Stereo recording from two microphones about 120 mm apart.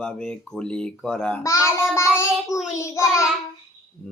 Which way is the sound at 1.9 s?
25° left (ahead or behind).